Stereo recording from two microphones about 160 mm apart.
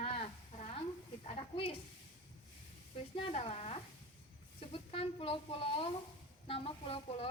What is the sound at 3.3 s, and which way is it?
Speech, 40° left (ahead or behind).